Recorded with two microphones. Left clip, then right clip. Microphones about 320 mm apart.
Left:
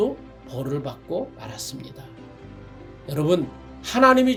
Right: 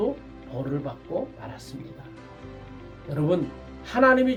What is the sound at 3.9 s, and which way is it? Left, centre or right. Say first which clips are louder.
Speech: left 3 dB; left.